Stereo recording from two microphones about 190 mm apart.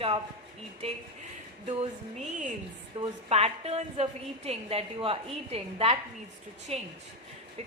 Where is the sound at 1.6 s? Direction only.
30° right (ahead or behind).